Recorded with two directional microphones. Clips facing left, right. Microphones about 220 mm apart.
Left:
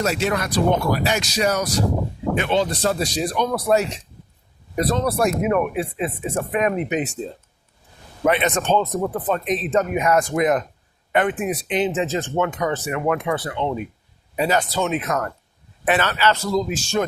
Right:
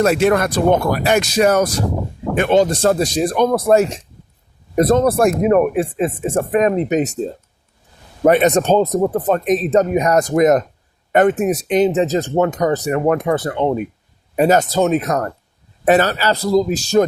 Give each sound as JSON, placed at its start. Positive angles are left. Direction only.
{"t": 0.0, "sound": "speech", "side_deg": -55}
{"t": 5.4, "sound": "speech", "side_deg": -35}